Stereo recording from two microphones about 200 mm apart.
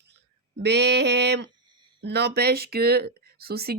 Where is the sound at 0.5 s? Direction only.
55° right (ahead or behind).